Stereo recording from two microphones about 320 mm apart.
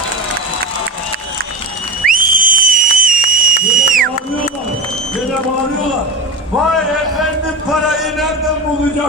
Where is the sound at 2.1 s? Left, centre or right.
Right.